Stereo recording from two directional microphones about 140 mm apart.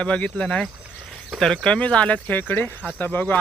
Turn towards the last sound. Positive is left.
turn(degrees=15)  # may be behind; listen again after turning